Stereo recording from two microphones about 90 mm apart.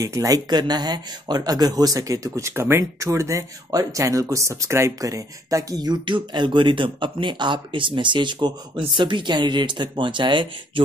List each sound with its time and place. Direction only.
0.0 s speech: 35° right (ahead or behind)
0.5 s speech: 50° right (ahead or behind)
6.0 s speech: 60° right (ahead or behind)